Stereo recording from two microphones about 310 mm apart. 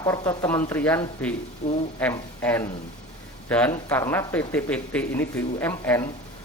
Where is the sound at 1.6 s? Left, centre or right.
Centre.